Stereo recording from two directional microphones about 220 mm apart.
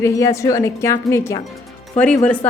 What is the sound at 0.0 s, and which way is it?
Speech, 15° left (ahead or behind).